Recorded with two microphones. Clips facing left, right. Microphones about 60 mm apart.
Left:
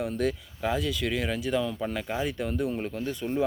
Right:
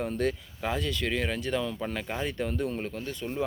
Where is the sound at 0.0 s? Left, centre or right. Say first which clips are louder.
Left 1 dB; centre.